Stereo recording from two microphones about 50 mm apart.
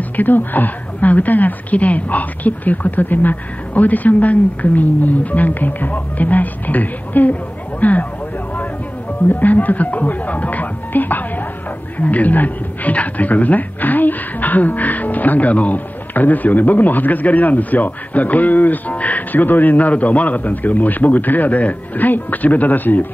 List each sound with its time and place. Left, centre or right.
0.1 s a man's voice: left
9.3 s a man's voice: left